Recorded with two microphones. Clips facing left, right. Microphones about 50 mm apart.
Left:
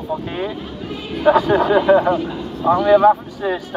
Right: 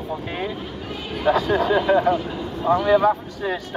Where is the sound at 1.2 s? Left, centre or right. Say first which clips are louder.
Left 5 dB; left.